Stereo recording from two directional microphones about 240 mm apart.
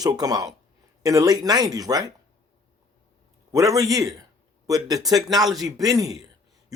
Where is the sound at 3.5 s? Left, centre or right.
Centre.